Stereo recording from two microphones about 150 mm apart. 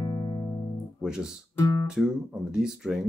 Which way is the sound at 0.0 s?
25° left (ahead or behind).